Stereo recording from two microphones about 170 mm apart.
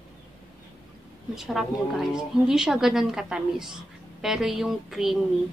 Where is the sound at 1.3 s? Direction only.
Centre (ahead or behind).